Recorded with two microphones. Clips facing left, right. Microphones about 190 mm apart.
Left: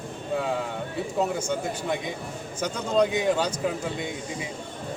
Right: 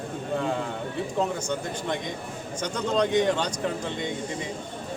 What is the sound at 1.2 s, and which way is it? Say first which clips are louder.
A man's voice: left 3 dB; 5° left (ahead or behind).